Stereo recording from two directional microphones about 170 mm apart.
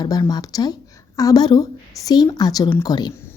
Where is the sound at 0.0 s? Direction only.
25° left (ahead or behind).